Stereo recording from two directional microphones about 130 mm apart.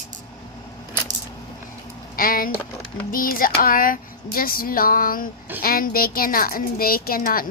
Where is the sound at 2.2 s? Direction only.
90° left.